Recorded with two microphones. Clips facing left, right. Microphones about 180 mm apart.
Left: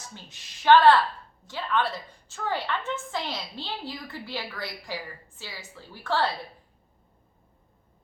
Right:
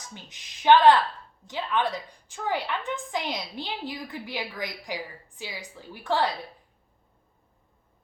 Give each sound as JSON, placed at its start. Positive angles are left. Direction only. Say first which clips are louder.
{"t": 0.1, "sound": "a woman's voice", "louder": "right 1 dB", "side_deg": -15}